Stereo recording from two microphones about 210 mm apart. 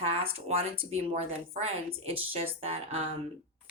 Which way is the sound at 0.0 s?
30° right (ahead or behind).